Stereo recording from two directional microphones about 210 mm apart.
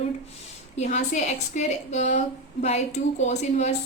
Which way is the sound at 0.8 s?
35° left (ahead or behind).